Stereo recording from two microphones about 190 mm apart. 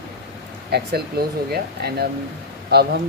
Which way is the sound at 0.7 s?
60° right (ahead or behind).